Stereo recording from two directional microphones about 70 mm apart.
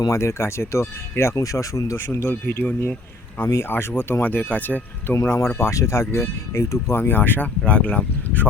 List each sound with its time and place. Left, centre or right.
0.1 s speech: left
2.2 s speech: left